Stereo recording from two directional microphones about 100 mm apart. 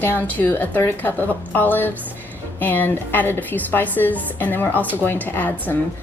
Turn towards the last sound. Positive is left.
turn(degrees=20)  # may be behind; listen again after turning